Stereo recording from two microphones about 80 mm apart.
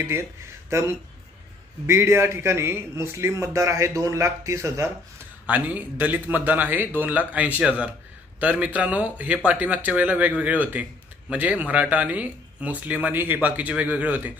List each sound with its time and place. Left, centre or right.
0.0 s speech: right
5.5 s speech: right